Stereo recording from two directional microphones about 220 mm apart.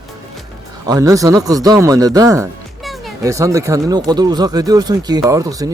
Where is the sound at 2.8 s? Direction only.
Centre (ahead or behind).